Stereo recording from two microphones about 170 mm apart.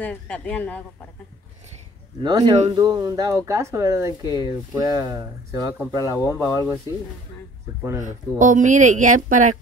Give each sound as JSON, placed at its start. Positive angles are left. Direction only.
{"t": 0.0, "sound": "speech", "side_deg": 10}
{"t": 2.2, "sound": "speech", "side_deg": -25}
{"t": 8.0, "sound": "speech", "side_deg": -50}